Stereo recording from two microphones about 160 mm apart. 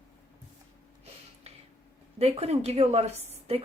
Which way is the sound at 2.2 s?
40° right (ahead or behind).